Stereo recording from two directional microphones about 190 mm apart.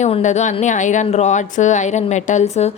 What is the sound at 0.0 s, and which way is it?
Speech, 40° left (ahead or behind).